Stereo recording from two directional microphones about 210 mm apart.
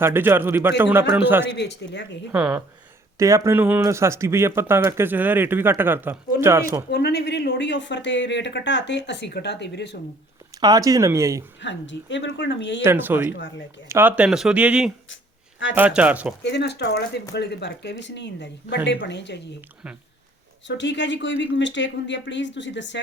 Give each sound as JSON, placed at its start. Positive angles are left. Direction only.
{"t": 0.0, "sound": "speech", "side_deg": -10}
{"t": 1.5, "sound": "speech", "side_deg": 55}
{"t": 2.3, "sound": "speech", "side_deg": -5}
{"t": 6.9, "sound": "speech", "side_deg": 50}
{"t": 10.6, "sound": "speech", "side_deg": -15}
{"t": 11.6, "sound": "speech", "side_deg": 60}
{"t": 12.8, "sound": "speech", "side_deg": -10}
{"t": 13.3, "sound": "speech", "side_deg": 60}
{"t": 13.8, "sound": "speech", "side_deg": -10}
{"t": 15.1, "sound": "a sound", "side_deg": 65}
{"t": 15.7, "sound": "speech", "side_deg": -5}
{"t": 16.4, "sound": "speech", "side_deg": 55}
{"t": 20.7, "sound": "speech", "side_deg": 60}